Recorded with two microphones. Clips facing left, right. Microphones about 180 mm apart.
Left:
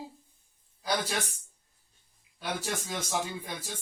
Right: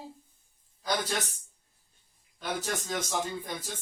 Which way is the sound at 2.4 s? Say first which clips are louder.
Right 1 dB; 10° left (ahead or behind).